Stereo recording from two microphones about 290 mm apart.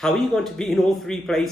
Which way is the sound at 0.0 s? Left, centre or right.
Centre.